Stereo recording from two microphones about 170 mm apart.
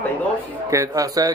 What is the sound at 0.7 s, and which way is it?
Speech, 20° right (ahead or behind).